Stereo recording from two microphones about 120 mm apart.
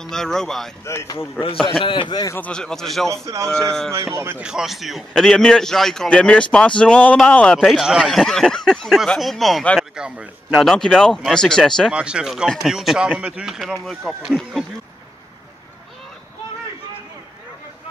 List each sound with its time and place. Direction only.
0.0 s a man's voice: 5° left (ahead or behind)
0.8 s speech: 25° left (ahead or behind)
1.8 s a man's voice: 45° left (ahead or behind)
2.4 s a man's voice: 5° left (ahead or behind)
3.3 s speech: 25° right (ahead or behind)
4.4 s a man's voice: 5° right (ahead or behind)
11.9 s a man's voice: 10° right (ahead or behind)